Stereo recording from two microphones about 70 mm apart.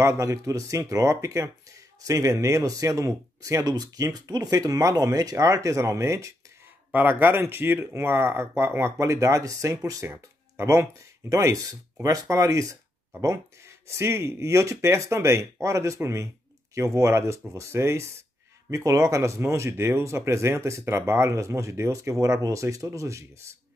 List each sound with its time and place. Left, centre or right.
0.0 s speech: right
3.7 s speech: right
6.9 s speech: right
13.8 s speech: right